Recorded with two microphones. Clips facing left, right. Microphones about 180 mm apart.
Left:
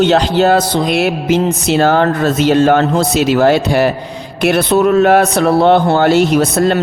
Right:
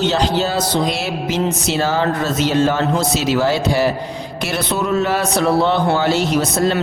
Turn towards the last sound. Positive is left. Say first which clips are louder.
# left 5 dB
turn(degrees=60)  # may be behind; listen again after turning